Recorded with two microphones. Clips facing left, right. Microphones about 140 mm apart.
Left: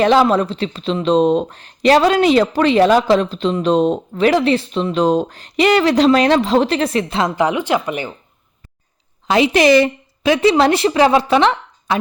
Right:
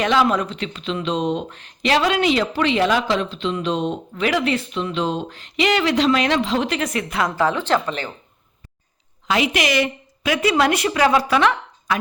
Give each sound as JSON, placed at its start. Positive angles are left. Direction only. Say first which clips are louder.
{"t": 0.0, "sound": "speech", "louder": "left 6 dB", "side_deg": 35}
{"t": 9.2, "sound": "a woman's voice", "louder": "left 8 dB", "side_deg": 30}